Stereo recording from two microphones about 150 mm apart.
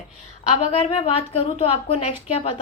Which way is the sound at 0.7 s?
40° left (ahead or behind).